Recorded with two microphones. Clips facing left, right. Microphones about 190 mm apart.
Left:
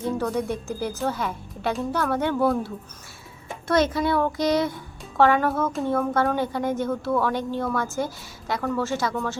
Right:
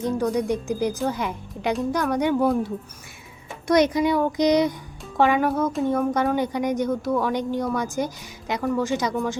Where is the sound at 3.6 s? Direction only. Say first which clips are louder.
Right 3 dB; 15° right (ahead or behind).